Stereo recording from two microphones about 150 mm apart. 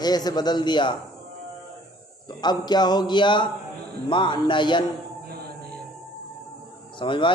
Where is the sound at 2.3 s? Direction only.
30° left (ahead or behind).